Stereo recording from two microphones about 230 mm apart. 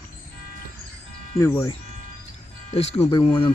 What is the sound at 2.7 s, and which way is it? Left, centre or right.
Speech, left.